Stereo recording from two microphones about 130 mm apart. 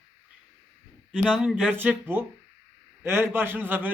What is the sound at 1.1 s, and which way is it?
Speech, 5° left (ahead or behind).